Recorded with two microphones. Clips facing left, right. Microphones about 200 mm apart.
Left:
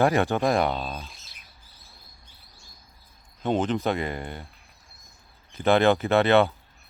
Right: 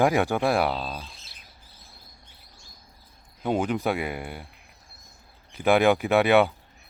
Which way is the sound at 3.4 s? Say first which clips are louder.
Left 1 dB; 10° right (ahead or behind).